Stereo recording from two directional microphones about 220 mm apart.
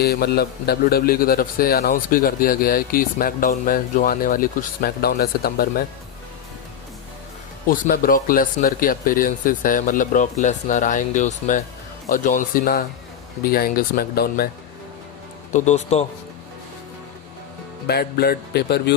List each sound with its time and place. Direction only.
0.0 s a man's voice: 45° left (ahead or behind)
7.7 s a man's voice: 40° left (ahead or behind)
15.5 s a man's voice: 30° left (ahead or behind)
17.8 s speech: 45° left (ahead or behind)